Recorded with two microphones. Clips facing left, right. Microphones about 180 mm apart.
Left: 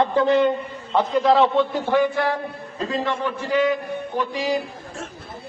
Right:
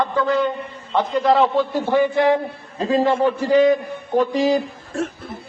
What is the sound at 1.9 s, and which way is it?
Speech, 15° right (ahead or behind).